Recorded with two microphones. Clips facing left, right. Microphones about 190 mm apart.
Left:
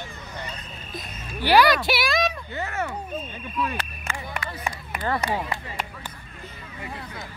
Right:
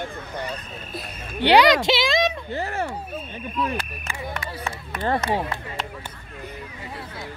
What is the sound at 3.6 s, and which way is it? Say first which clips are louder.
Speech: right 2 dB; 20° right (ahead or behind).